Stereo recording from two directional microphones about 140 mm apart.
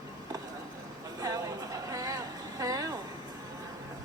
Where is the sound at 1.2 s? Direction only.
25° right (ahead or behind).